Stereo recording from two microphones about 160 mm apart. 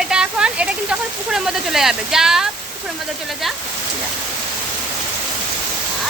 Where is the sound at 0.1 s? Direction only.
5° right (ahead or behind).